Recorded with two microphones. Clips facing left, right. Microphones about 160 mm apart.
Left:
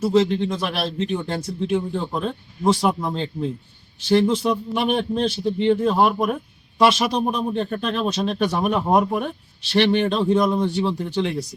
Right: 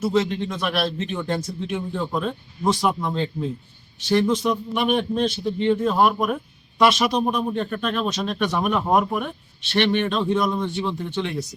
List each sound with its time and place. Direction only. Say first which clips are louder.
0.0 s a man's voice: left 3 dB; 30° left (ahead or behind)